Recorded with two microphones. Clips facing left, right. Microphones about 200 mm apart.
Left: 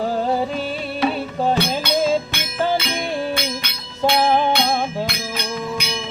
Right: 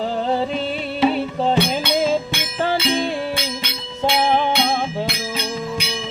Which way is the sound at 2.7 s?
30° right (ahead or behind).